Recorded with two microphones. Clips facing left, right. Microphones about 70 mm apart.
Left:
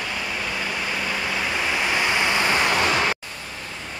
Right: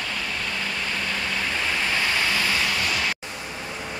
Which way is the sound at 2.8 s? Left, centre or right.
Left.